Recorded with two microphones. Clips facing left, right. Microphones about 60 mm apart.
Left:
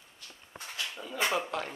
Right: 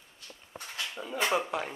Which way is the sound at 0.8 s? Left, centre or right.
Centre.